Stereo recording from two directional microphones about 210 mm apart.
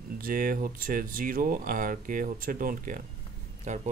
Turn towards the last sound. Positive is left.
turn(degrees=-35)  # may be behind; listen again after turning